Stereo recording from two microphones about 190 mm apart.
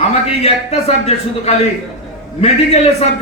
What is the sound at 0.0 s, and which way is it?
A man's voice, 35° left (ahead or behind).